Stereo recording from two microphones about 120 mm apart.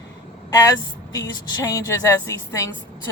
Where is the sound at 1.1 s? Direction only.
30° left (ahead or behind).